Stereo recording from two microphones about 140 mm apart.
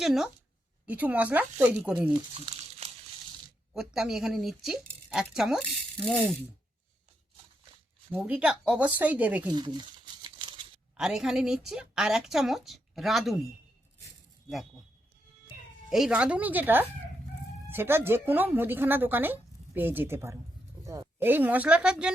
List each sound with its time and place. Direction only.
0.0 s a woman's voice: centre (ahead or behind)
2.3 s crumpling: 45° right (ahead or behind)
3.8 s a woman's voice: centre (ahead or behind)
8.1 s a woman's voice: 10° right (ahead or behind)
9.5 s crumpling: 30° right (ahead or behind)
10.9 s a woman's voice: 5° right (ahead or behind)
15.9 s a woman's voice: 5° right (ahead or behind)